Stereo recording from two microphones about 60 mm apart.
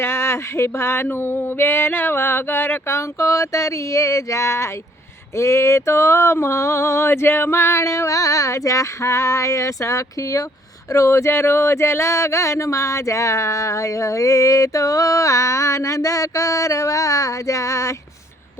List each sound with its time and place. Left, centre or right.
0.0 s speech: left
3.2 s speech: left
5.4 s a sound: left
10.9 s speech: left